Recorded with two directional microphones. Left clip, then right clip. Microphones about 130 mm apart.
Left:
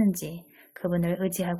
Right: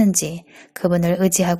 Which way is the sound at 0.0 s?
35° right (ahead or behind).